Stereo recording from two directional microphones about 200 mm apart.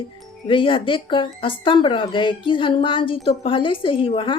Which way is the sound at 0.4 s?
25° left (ahead or behind).